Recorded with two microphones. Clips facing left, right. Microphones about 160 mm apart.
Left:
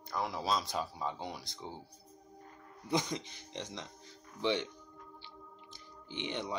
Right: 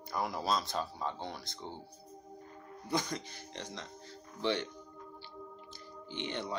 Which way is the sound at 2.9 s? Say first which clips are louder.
Left 1 dB; 20° left (ahead or behind).